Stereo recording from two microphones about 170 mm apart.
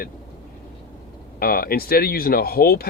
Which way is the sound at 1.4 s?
60° left (ahead or behind).